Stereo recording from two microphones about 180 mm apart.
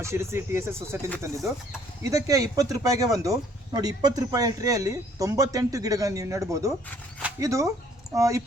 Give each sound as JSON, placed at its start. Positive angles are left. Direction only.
{"t": 0.0, "sound": "speech", "side_deg": -15}
{"t": 2.0, "sound": "speech", "side_deg": -20}
{"t": 7.2, "sound": "a sound", "side_deg": -10}
{"t": 7.4, "sound": "speech", "side_deg": -20}